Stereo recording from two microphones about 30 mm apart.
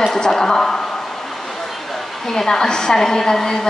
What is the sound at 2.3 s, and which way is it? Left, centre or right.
A woman's voice, centre.